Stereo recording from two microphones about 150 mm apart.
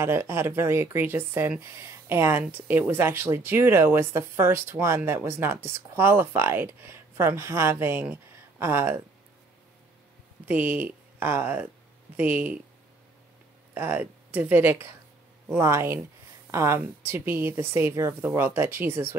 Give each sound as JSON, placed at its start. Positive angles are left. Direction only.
{"t": 0.0, "sound": "speech", "side_deg": -15}
{"t": 10.4, "sound": "speech", "side_deg": -10}
{"t": 13.7, "sound": "speech", "side_deg": -10}